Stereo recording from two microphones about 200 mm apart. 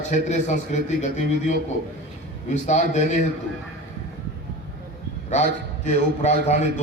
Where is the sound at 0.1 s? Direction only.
35° left (ahead or behind).